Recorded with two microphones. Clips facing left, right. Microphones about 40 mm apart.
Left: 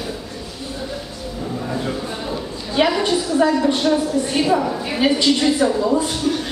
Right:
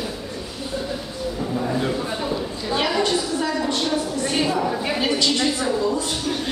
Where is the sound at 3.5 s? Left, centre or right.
Centre.